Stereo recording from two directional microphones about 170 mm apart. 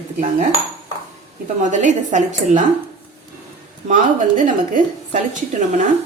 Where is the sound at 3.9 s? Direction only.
50° right (ahead or behind).